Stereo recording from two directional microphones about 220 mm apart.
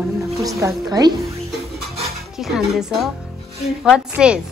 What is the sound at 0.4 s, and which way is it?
Speech, 15° right (ahead or behind).